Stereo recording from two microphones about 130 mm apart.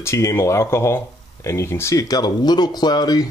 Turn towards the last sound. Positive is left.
turn(degrees=30)  # may be behind; listen again after turning